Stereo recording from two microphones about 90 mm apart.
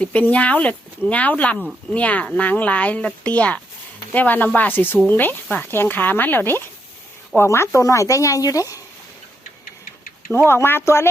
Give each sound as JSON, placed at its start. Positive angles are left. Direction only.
{"t": 0.0, "sound": "speech", "side_deg": 15}
{"t": 10.3, "sound": "speech", "side_deg": 25}